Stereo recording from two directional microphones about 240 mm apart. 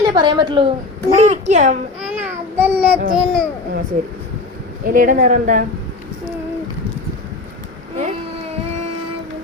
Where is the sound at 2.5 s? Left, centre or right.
Centre.